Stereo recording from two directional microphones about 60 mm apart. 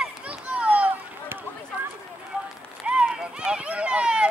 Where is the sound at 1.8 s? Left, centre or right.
Right.